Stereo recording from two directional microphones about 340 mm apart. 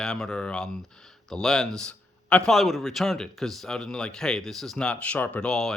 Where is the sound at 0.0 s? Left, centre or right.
Centre.